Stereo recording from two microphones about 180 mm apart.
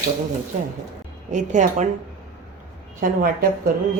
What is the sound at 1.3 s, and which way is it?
Speech, 40° right (ahead or behind).